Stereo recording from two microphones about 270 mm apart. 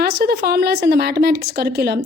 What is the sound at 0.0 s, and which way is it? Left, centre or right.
A woman's voice, right.